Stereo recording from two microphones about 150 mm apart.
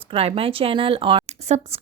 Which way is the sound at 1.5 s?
45° right (ahead or behind).